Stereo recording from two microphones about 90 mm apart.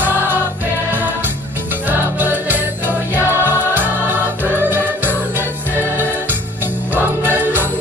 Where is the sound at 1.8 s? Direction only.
20° right (ahead or behind).